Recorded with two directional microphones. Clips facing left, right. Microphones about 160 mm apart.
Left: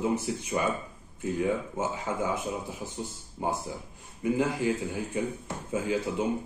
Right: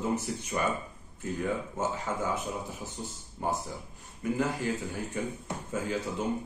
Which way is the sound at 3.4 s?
15° left (ahead or behind).